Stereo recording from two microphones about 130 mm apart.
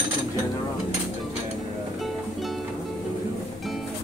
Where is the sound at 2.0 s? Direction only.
Centre (ahead or behind).